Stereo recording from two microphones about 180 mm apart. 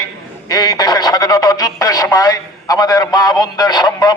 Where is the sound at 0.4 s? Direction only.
20° left (ahead or behind).